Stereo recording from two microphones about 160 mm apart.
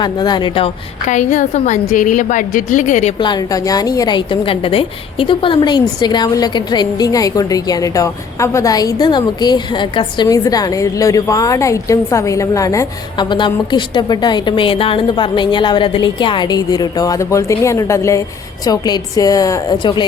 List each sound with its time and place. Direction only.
0.0 s a woman's voice: 25° left (ahead or behind)
1.1 s a woman's voice: 50° left (ahead or behind)
3.2 s a woman's voice: 25° left (ahead or behind)